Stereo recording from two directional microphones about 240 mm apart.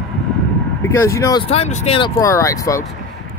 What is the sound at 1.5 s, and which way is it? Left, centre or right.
Speech, left.